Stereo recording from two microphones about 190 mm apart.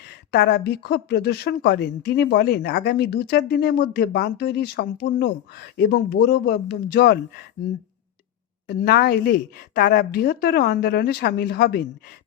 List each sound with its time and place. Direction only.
0.3 s speech: 50° left (ahead or behind)
8.6 s speech: 55° left (ahead or behind)